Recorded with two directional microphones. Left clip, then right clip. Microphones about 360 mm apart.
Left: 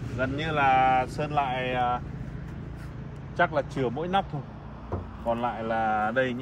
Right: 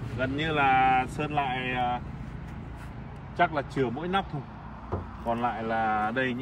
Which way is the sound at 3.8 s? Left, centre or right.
Centre.